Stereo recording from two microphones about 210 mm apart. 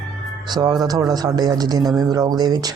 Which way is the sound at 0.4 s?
20° right (ahead or behind).